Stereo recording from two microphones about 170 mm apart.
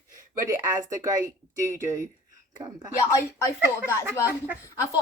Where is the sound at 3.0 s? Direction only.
15° left (ahead or behind).